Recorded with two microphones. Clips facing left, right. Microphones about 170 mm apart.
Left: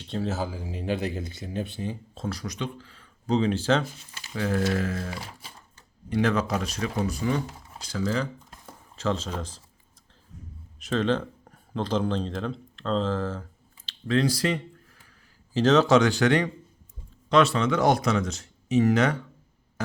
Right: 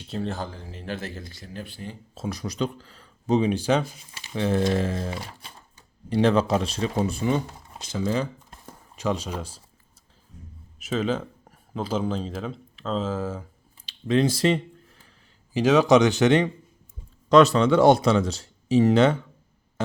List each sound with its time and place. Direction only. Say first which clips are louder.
0.1 s speech: left 1 dB; centre (ahead or behind); by 2.0 s 20° left (ahead or behind)
2.2 s speech: right 2 dB; 5° right (ahead or behind)
2.5 s speech: right 5 dB; 40° right (ahead or behind)
3.2 s speech: right 2 dB; 20° right (ahead or behind)
4.4 s speech: right 3 dB; 25° right (ahead or behind)
5.1 s speech: right 3 dB; centre (ahead or behind)
6.1 s speech: right 4 dB; 30° right (ahead or behind); by 9.6 s 10° right (ahead or behind)
10.8 s speech: left 1 dB; 5° right (ahead or behind)
13.8 s a sound: right 2 dB; 20° right (ahead or behind)
15.5 s speech: right 2 dB; 10° right (ahead or behind)
17.2 s speech: right 5 dB; 40° right (ahead or behind)